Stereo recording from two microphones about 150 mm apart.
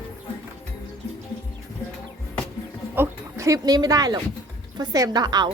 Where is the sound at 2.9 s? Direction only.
15° right (ahead or behind).